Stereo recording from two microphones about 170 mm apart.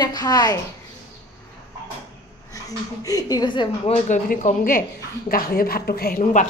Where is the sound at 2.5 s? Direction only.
20° left (ahead or behind); by 4.2 s 35° left (ahead or behind).